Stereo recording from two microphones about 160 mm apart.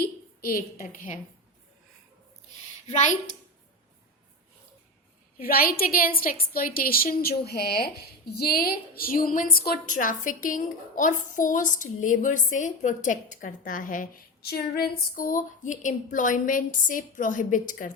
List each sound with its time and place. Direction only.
0.0 s a sound: 65° left (ahead or behind)
2.8 s a woman's voice: 45° left (ahead or behind)
5.4 s a woman's voice: 70° left (ahead or behind)
8.4 s a woman's voice: 70° left (ahead or behind); by 17.9 s 55° left (ahead or behind)